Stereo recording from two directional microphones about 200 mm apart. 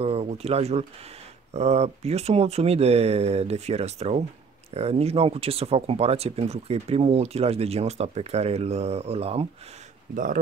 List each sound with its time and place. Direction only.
0.0 s speech: 30° right (ahead or behind)
10.1 s speech: 40° right (ahead or behind)